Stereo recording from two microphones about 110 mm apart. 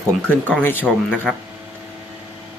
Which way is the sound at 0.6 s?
15° left (ahead or behind).